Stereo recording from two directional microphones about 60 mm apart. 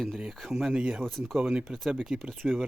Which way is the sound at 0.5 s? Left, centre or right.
Centre.